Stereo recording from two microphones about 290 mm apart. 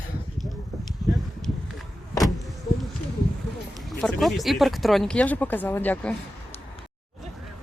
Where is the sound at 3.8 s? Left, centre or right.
Centre.